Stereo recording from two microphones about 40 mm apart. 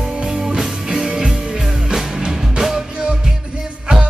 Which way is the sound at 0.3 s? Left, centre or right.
Centre.